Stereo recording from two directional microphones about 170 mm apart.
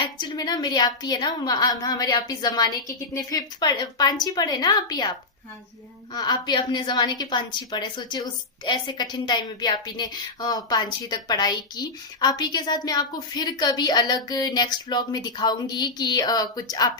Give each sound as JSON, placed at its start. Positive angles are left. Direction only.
{"t": 0.0, "sound": "a woman's voice", "side_deg": 25}
{"t": 6.1, "sound": "a woman's voice", "side_deg": 25}